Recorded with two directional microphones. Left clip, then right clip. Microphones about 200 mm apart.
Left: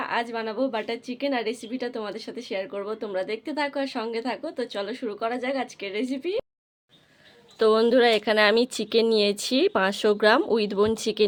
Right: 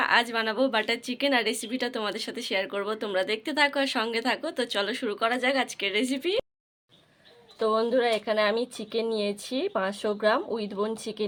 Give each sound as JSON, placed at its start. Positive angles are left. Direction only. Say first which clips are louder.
{"t": 0.0, "sound": "a woman's voice", "louder": "right 4 dB", "side_deg": 0}
{"t": 7.6, "sound": "speech", "louder": "left 5 dB", "side_deg": 45}